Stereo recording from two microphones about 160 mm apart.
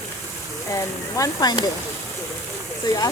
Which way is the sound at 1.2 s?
25° left (ahead or behind).